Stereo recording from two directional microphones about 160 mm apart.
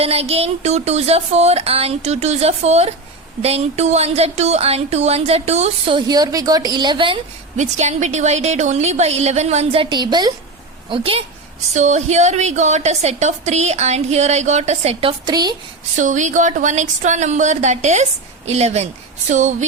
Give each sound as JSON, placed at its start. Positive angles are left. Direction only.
{"t": 0.0, "sound": "speech", "side_deg": -40}
{"t": 7.5, "sound": "a woman's voice", "side_deg": -45}
{"t": 11.7, "sound": "a woman's voice", "side_deg": -45}
{"t": 15.3, "sound": "a woman's voice", "side_deg": -25}
{"t": 16.0, "sound": "a woman's voice", "side_deg": -50}